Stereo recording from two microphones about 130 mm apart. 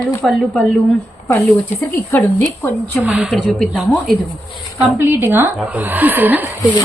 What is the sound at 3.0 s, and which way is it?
A woman's voice, 5° right (ahead or behind).